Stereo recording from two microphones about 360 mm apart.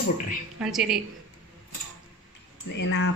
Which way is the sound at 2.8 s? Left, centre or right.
Left.